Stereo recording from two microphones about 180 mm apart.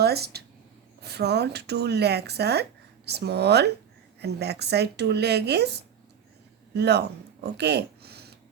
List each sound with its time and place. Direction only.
0.0 s speech: 60° right (ahead or behind)